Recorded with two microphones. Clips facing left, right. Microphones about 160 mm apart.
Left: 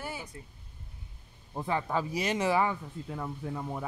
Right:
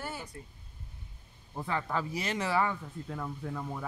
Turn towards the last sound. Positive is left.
turn(degrees=15)  # may be behind; listen again after turning